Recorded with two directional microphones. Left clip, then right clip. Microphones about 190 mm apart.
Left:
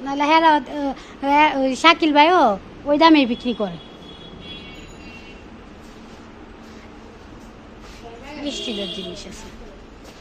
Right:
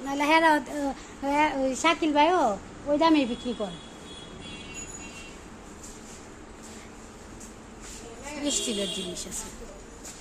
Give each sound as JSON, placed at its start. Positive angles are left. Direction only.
{"t": 0.0, "sound": "a child's voice", "side_deg": -5}
{"t": 8.5, "sound": "a woman's voice", "side_deg": -30}